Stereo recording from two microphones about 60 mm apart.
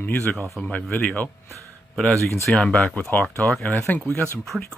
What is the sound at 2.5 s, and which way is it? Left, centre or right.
Speech, centre.